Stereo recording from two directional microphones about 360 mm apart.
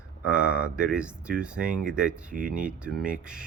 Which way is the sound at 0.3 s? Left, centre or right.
Centre.